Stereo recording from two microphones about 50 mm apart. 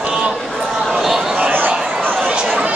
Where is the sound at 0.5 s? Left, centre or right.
Centre.